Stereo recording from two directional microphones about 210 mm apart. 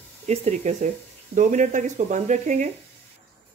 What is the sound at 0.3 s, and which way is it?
Speech, 35° right (ahead or behind).